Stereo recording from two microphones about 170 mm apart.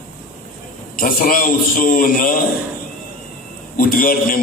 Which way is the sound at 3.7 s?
55° left (ahead or behind).